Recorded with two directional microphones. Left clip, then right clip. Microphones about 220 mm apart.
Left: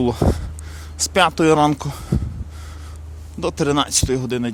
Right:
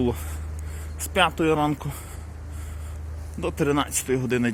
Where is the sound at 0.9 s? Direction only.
35° left (ahead or behind).